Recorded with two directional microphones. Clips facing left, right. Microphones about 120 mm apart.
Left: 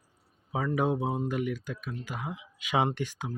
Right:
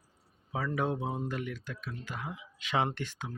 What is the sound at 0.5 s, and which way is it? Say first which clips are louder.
Speech: left 4 dB; 15° left (ahead or behind).